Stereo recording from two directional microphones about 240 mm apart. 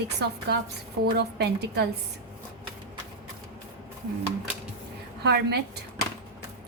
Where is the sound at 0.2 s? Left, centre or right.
Right.